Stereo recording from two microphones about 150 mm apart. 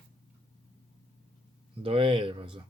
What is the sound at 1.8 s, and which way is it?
Speech, 35° right (ahead or behind).